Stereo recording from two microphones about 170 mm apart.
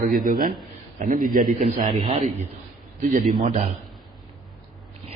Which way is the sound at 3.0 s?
50° right (ahead or behind).